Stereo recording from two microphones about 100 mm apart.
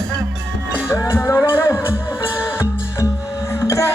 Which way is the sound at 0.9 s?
30° left (ahead or behind).